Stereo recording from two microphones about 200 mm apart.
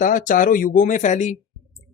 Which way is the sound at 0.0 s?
40° left (ahead or behind).